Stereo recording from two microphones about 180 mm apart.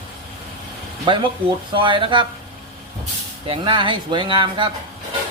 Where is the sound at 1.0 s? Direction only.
25° right (ahead or behind).